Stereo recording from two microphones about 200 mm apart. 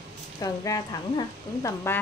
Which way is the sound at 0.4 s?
20° left (ahead or behind).